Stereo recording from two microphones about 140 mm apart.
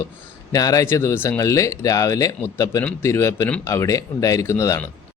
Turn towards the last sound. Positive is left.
turn(degrees=20)  # may be behind; listen again after turning